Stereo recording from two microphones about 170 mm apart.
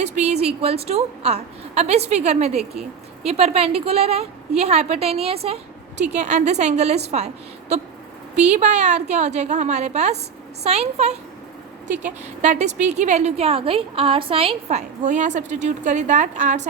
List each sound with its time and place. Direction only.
0.0 s a woman's voice: 40° right (ahead or behind)
8.4 s a woman's voice: 40° right (ahead or behind)